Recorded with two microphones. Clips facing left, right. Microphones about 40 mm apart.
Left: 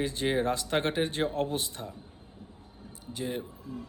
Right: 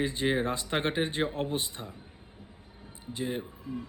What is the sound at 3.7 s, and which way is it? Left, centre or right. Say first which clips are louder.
Speech: right 3 dB; right.